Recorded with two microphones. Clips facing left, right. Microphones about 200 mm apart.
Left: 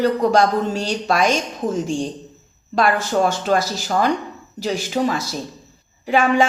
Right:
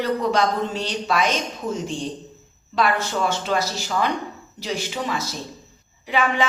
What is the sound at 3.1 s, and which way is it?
Speech, 45° left (ahead or behind).